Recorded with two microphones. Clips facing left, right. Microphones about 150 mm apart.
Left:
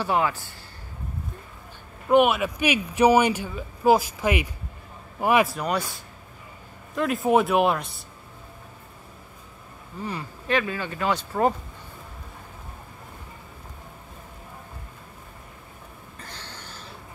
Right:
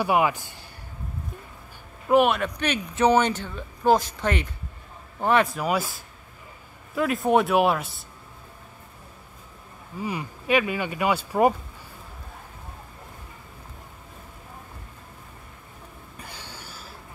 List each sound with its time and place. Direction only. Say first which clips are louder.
0.0 s speech: right 2 dB; 15° right (ahead or behind)
2.0 s speech: left 1 dB; centre (ahead or behind)
5.6 s speech: right 1 dB; 5° right (ahead or behind)
7.0 s speech: even; centre (ahead or behind)
9.9 s speech: right 2 dB; 10° right (ahead or behind)
16.2 s a sound: even; 10° right (ahead or behind)